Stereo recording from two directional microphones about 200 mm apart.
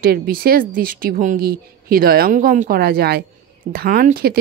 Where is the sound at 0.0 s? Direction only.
45° right (ahead or behind).